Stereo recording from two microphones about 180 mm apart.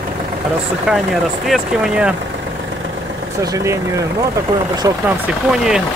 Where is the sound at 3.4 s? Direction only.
15° right (ahead or behind).